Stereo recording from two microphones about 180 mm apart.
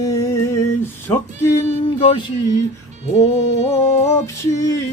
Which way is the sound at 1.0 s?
15° left (ahead or behind).